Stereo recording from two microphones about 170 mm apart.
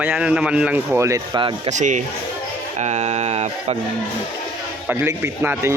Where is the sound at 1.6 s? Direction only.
45° right (ahead or behind).